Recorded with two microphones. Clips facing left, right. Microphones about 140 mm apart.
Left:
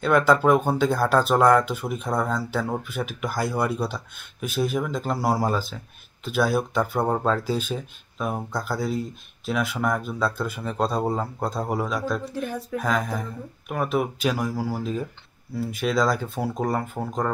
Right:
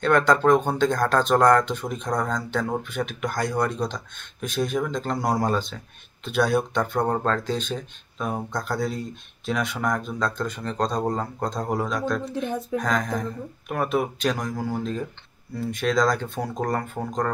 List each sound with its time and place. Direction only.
0.0 s speech: 5° left (ahead or behind)
12.3 s speech: 20° right (ahead or behind)
12.7 s speech: 5° left (ahead or behind)